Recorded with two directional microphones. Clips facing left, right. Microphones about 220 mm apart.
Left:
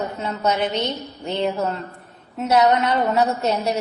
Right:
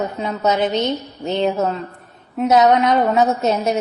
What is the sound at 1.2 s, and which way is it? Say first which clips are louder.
A woman's voice: right 4 dB; 20° right (ahead or behind).